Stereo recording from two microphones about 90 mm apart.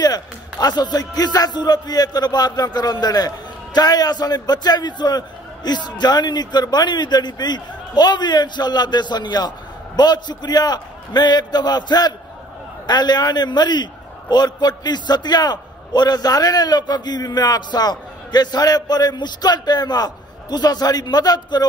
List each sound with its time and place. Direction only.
0.0 s a man's voice: 45° left (ahead or behind)